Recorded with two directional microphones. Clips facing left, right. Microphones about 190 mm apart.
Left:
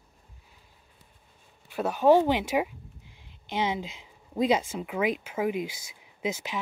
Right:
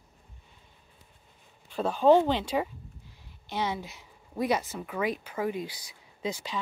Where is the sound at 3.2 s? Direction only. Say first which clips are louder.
Left 2 dB; 20° left (ahead or behind).